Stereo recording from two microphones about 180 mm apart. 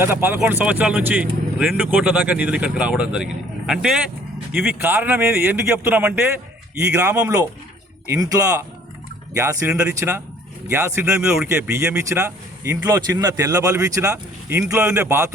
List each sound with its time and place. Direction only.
0.0 s a man's voice: 15° right (ahead or behind)